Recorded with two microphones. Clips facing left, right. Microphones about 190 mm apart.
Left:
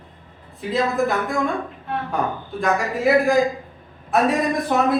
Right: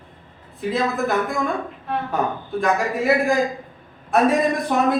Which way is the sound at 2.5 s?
Centre (ahead or behind).